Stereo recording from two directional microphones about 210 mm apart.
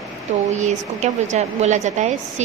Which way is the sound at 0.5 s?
35° right (ahead or behind).